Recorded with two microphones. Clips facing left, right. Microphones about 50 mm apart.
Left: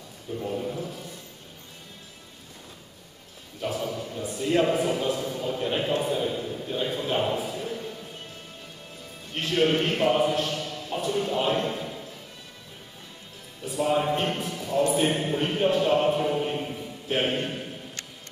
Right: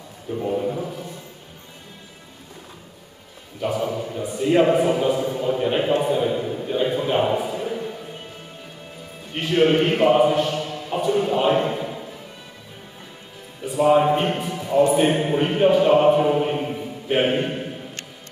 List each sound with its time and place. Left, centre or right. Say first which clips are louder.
0.3 s a sound: right 7 dB; centre
3.6 s a man's voice: right 6 dB; centre
9.3 s a man's voice: right 5 dB; centre
13.7 s a man's voice: right 8 dB; centre